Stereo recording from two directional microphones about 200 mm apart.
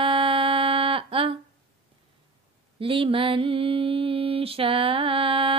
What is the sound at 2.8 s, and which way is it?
Mantra, 25° right (ahead or behind).